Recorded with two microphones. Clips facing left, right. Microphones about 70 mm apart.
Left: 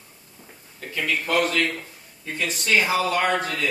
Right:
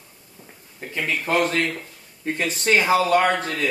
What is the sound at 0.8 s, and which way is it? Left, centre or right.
Speech, right.